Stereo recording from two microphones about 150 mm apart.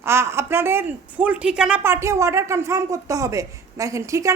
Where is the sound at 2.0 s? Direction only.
20° right (ahead or behind).